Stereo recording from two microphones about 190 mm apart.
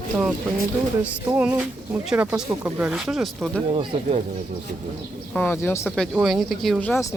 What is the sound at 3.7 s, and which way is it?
Speech, 30° right (ahead or behind).